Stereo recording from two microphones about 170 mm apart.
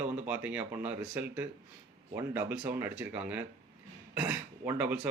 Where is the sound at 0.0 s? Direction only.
10° right (ahead or behind).